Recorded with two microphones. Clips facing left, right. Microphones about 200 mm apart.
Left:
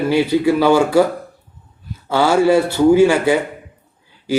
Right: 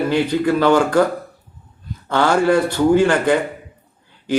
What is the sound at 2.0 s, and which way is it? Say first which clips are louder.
A man's voice: left 2 dB; 10° left (ahead or behind).